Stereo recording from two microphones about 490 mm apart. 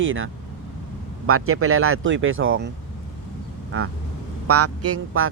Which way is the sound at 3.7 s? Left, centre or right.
Right.